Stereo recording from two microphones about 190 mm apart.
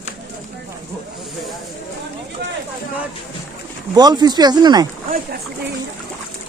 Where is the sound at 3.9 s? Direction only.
20° right (ahead or behind).